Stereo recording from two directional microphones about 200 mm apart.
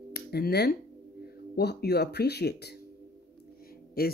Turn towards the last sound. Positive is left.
turn(degrees=50)  # may be behind; listen again after turning